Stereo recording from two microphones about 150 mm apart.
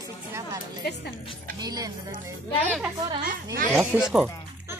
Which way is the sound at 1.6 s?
25° right (ahead or behind).